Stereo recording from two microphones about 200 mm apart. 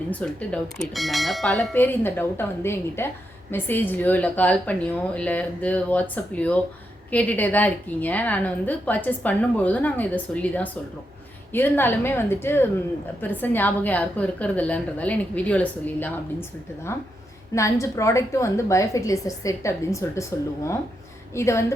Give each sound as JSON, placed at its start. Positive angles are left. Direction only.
{"t": 0.1, "sound": "a woman's voice", "side_deg": 5}
{"t": 17.5, "sound": "a woman's voice", "side_deg": 15}
{"t": 21.3, "sound": "a woman's voice", "side_deg": 15}